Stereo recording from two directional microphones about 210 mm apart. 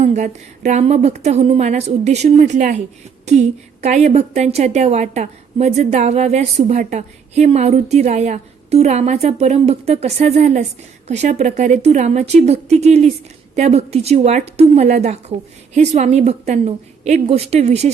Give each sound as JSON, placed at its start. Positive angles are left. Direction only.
{"t": 0.0, "sound": "a woman's voice", "side_deg": -35}